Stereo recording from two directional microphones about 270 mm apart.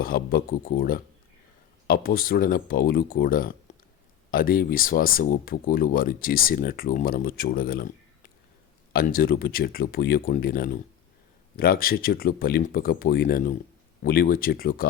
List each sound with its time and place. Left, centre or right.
0.0 s speech: left